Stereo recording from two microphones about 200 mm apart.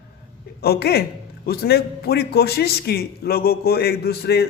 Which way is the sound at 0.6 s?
55° left (ahead or behind).